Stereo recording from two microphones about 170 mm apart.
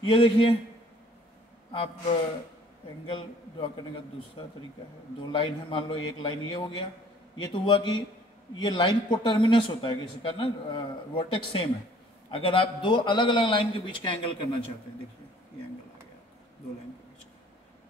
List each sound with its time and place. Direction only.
0.0 s a man's voice: 30° left (ahead or behind)
3.1 s a man's voice: 30° left (ahead or behind)